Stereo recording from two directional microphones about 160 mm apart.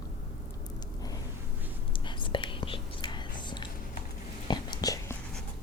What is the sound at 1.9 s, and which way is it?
Whispering, 30° left (ahead or behind).